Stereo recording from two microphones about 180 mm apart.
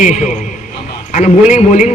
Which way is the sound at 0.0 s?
45° left (ahead or behind).